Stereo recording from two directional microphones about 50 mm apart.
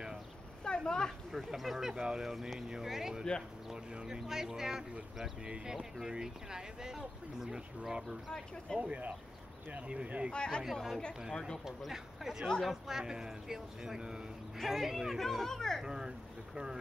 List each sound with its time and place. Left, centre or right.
0.7 s a sound: centre
1.3 s speech: centre
8.7 s speech: right
10.3 s a child's voice: centre
10.6 s speech: centre
11.3 s a child's voice: centre
11.8 s speech: centre
15.2 s a child's voice: centre
15.8 s speech: centre